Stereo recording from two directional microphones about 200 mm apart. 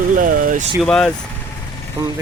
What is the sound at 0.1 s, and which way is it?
Speech, 45° right (ahead or behind).